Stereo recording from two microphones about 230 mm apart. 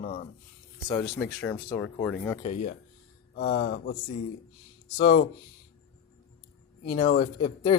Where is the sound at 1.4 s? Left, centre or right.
Centre.